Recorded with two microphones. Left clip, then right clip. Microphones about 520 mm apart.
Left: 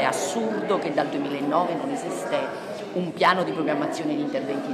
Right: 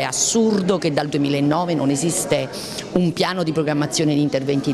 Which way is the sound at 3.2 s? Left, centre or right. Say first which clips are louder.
Left 5 dB; right.